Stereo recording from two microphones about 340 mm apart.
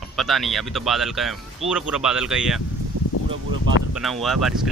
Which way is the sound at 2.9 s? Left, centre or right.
Right.